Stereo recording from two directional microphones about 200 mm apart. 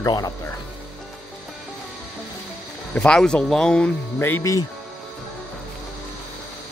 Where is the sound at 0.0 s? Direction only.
20° left (ahead or behind).